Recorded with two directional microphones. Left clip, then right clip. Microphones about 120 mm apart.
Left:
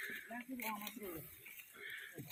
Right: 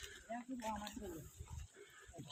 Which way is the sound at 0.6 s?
5° right (ahead or behind).